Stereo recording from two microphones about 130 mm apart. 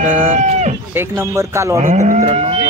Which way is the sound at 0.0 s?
70° right (ahead or behind).